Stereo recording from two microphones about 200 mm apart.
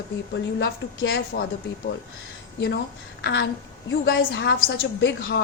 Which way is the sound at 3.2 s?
60° left (ahead or behind).